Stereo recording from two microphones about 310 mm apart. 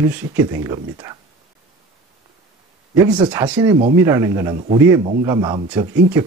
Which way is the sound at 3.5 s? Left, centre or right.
Centre.